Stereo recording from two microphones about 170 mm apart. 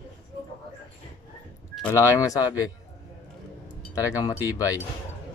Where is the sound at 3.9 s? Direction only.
20° left (ahead or behind).